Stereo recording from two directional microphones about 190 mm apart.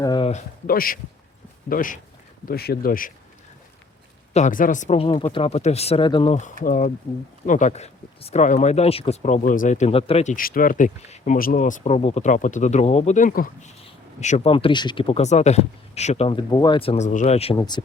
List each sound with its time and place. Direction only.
0.0 s a sound: 20° left (ahead or behind)
0.7 s speech: 50° left (ahead or behind)
4.4 s speech: 40° left (ahead or behind); by 6.3 s 25° left (ahead or behind)
6.3 s speech: 45° left (ahead or behind)
10.3 s speech: 45° left (ahead or behind); by 17.6 s 30° left (ahead or behind)
17.6 s speech: 20° left (ahead or behind)